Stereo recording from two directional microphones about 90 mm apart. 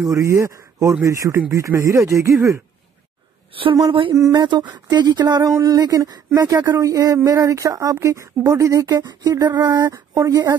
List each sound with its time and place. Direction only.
0.0 s speech: 35° right (ahead or behind)
4.3 s speech: 55° right (ahead or behind)
9.8 s speech: 35° right (ahead or behind)